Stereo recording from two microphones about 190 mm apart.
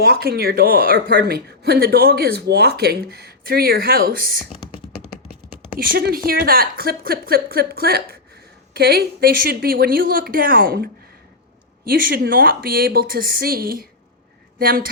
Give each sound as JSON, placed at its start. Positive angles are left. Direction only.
{"t": 0.0, "sound": "speech", "side_deg": -55}
{"t": 5.8, "sound": "speech", "side_deg": -50}
{"t": 11.9, "sound": "speech", "side_deg": -50}